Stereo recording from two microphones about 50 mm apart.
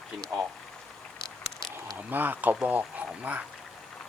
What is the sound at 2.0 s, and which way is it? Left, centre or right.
Speech, right.